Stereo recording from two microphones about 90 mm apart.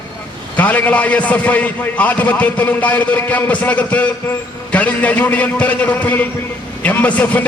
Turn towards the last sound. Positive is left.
turn(degrees=15)  # may be behind; listen again after turning